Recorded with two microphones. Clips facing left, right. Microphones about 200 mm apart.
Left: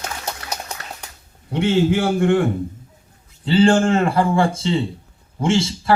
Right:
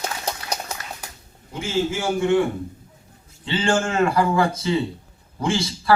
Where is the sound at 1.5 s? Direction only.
65° left (ahead or behind).